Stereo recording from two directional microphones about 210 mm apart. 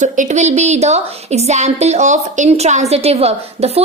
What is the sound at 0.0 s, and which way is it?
A woman's voice, 35° right (ahead or behind).